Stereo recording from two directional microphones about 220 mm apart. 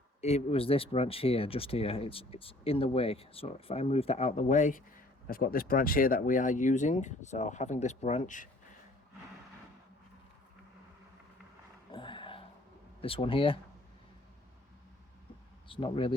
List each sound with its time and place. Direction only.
0.2 s speech: 30° left (ahead or behind)
11.9 s dog: 20° left (ahead or behind)
13.0 s speech: 25° left (ahead or behind)
15.7 s speech: 25° left (ahead or behind)